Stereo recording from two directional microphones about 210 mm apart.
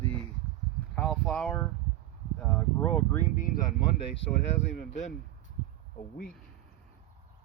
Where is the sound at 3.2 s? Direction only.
40° left (ahead or behind).